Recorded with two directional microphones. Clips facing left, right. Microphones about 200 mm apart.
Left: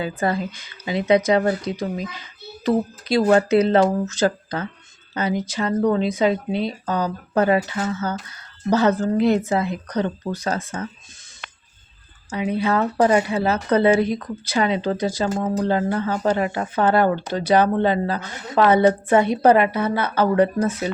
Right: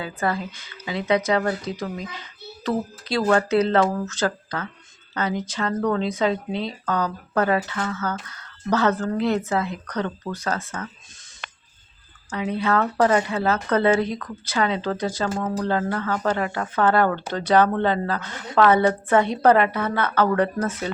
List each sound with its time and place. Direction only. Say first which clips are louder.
0.0 s speech: left 3 dB; 20° left (ahead or behind)
12.3 s speech: left 2 dB; 10° left (ahead or behind)